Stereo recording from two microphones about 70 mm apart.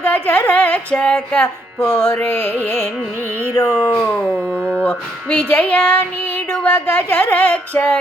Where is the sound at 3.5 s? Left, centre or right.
Left.